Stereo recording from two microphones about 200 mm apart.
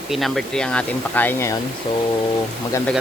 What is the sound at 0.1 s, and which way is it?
Speech, centre (ahead or behind).